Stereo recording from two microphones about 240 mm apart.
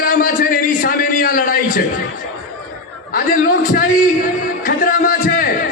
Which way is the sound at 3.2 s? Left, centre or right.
Left.